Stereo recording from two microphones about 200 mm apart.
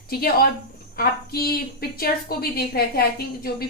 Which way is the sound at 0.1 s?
50° left (ahead or behind).